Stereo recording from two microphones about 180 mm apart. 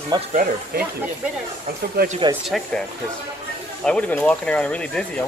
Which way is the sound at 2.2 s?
25° right (ahead or behind).